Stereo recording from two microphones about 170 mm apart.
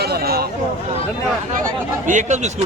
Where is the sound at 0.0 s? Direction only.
70° right (ahead or behind).